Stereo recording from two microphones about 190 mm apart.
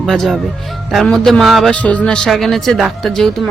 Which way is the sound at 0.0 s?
Centre (ahead or behind).